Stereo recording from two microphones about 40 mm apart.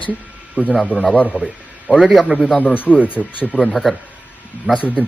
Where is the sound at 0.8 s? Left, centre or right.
Left.